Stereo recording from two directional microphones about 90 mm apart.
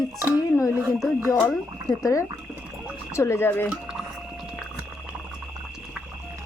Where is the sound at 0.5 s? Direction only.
30° left (ahead or behind).